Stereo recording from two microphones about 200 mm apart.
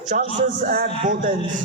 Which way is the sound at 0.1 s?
40° right (ahead or behind).